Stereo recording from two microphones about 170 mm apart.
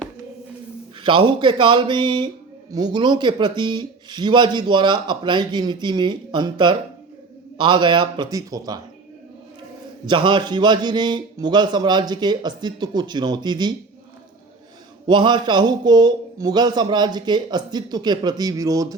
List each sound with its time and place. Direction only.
1.0 s speech: 30° right (ahead or behind)
10.1 s speech: 30° right (ahead or behind)
15.0 s speech: 25° right (ahead or behind)